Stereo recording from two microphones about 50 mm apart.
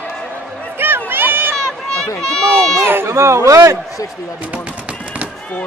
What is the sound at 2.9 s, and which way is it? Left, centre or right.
Speech, right.